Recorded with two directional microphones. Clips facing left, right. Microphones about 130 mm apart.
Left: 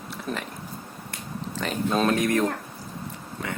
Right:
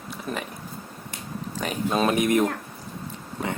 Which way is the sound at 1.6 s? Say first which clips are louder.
Even; 10° right (ahead or behind).